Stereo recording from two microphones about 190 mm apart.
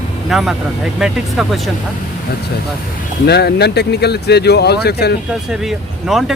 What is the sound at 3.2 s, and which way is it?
Speech, 60° left (ahead or behind).